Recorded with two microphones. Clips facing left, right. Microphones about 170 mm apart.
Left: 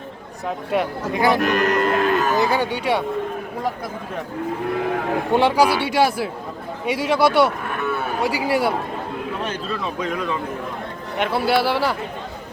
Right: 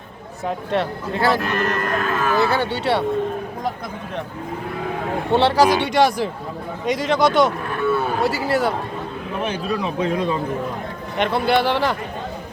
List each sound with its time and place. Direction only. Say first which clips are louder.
0.4 s speech: even; 10° left (ahead or behind)
5.3 s speech: right 2 dB; 10° left (ahead or behind)
9.5 s speech: right 3 dB; 15° right (ahead or behind)
10.0 s speech: right 4 dB; 30° right (ahead or behind)
11.2 s speech: right 1 dB; 5° left (ahead or behind)